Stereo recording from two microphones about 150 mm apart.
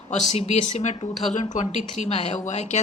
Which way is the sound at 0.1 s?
50° left (ahead or behind).